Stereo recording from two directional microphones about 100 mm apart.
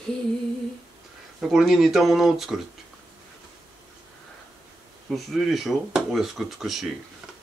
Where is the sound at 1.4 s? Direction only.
5° right (ahead or behind).